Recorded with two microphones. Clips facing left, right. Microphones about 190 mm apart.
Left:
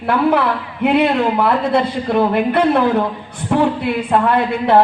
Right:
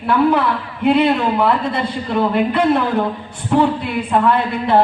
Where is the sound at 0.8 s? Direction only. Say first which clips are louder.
Even; 65° left (ahead or behind).